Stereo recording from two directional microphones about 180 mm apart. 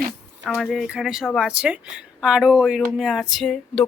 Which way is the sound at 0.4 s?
Centre (ahead or behind).